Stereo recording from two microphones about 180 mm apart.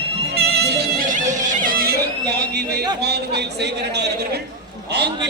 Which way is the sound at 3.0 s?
65° right (ahead or behind).